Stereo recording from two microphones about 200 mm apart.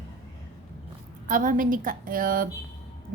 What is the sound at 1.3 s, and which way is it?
A woman's voice, 40° right (ahead or behind).